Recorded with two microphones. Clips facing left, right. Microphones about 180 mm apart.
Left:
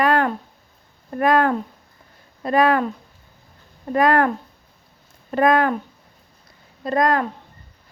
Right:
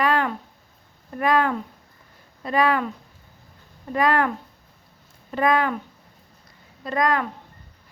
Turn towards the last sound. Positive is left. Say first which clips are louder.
# left 4 dB
turn(degrees=40)  # may be behind; listen again after turning